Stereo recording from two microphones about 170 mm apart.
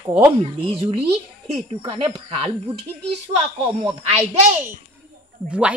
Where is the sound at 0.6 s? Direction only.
35° right (ahead or behind).